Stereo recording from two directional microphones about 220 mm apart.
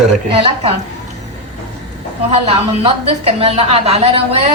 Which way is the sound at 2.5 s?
25° right (ahead or behind).